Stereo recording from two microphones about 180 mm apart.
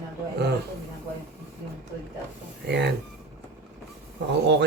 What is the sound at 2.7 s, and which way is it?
Speech, 70° right (ahead or behind).